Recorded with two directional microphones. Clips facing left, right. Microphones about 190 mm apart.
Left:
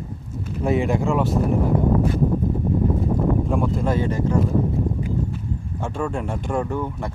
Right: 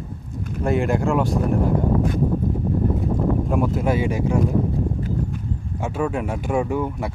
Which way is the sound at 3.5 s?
5° right (ahead or behind).